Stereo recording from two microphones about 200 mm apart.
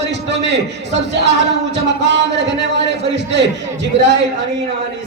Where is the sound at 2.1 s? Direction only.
60° right (ahead or behind).